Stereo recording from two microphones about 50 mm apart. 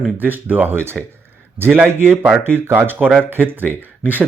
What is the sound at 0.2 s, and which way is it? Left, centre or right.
Speech, right.